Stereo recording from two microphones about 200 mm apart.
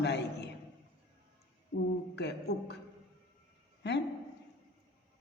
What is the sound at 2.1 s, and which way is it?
Speech, 55° left (ahead or behind).